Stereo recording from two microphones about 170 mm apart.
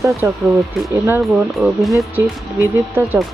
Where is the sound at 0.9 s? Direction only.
15° right (ahead or behind).